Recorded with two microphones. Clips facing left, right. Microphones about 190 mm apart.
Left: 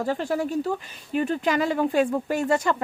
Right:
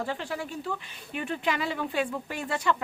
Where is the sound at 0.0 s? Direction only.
40° left (ahead or behind).